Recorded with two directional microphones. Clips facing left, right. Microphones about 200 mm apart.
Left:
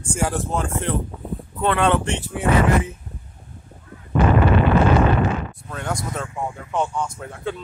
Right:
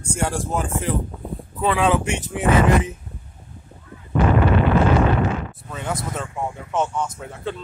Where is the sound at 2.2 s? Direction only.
20° right (ahead or behind).